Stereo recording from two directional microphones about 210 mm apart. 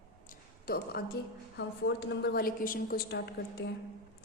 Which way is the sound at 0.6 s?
45° left (ahead or behind).